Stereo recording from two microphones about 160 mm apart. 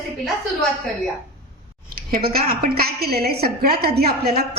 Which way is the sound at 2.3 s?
65° right (ahead or behind).